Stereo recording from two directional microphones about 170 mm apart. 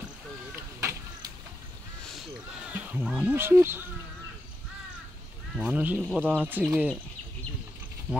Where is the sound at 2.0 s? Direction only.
5° right (ahead or behind).